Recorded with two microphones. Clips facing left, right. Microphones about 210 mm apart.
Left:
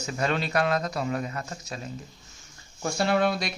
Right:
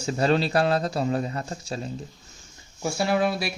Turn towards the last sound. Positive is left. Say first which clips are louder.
# right 1 dB
turn(degrees=0)  # may be behind; listen again after turning